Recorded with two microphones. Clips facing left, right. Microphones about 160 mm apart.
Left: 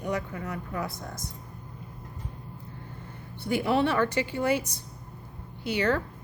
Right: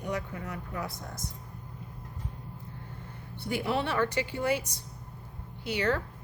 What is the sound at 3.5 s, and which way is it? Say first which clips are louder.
A woman's voice: left 5 dB; 55° left (ahead or behind).